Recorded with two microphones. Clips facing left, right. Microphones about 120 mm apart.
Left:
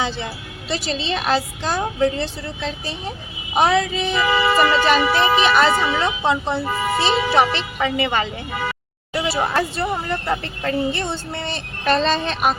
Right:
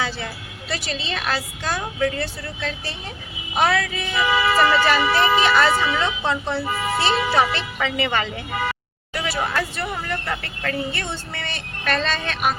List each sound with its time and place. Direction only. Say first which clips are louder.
0.7 s a woman's voice: left 5 dB; 25° left (ahead or behind)
9.1 s a sound: left 4 dB; 30° left (ahead or behind)
9.6 s a woman's voice: left 4 dB; 25° left (ahead or behind)